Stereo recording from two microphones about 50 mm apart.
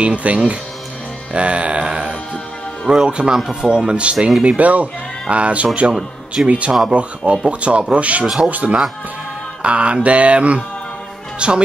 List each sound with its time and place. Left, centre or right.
0.0 s mantra: right
2.9 s speech: centre
3.6 s mantra: centre
4.3 s speech: centre
4.6 s speech: right
5.3 s mantra: right
8.4 s speech: right
9.6 s mantra: right
11.3 s speech: centre